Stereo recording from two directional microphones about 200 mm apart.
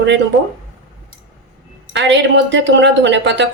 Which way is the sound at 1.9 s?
65° right (ahead or behind).